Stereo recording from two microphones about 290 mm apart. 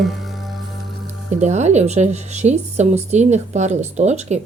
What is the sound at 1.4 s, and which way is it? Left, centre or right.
Speech, right.